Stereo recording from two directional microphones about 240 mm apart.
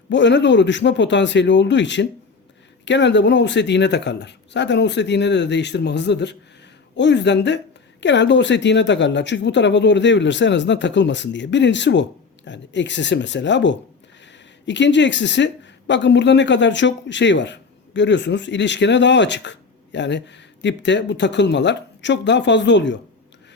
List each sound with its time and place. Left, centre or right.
0.1 s a man's voice: left